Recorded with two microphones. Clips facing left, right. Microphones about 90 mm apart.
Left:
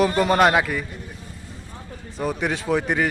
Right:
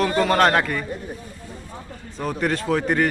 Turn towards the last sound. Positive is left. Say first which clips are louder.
# right 1 dB
turn(degrees=5)  # may be behind; listen again after turning